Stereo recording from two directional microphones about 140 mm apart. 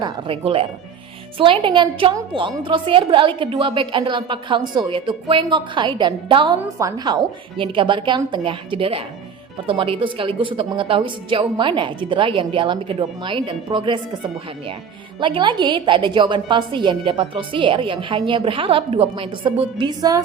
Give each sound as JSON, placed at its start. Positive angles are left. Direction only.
{"t": 0.0, "sound": "a woman's voice", "side_deg": -40}
{"t": 6.6, "sound": "a woman's voice", "side_deg": -25}
{"t": 15.2, "sound": "a woman's voice", "side_deg": -35}